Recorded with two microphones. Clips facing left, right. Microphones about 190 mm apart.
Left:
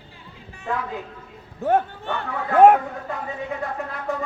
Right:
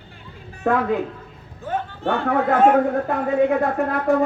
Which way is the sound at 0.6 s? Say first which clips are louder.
Right 9 dB; 60° right (ahead or behind).